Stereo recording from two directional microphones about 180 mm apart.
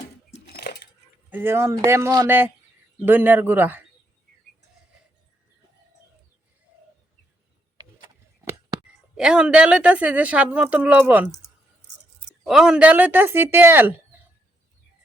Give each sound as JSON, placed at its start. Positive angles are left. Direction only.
{"t": 0.4, "sound": "a sound", "side_deg": 65}
{"t": 1.3, "sound": "speech", "side_deg": -10}
{"t": 9.1, "sound": "speech", "side_deg": -5}
{"t": 12.5, "sound": "speech", "side_deg": -5}